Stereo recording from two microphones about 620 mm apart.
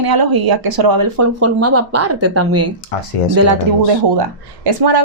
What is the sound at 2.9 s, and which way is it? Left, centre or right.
Speech, left.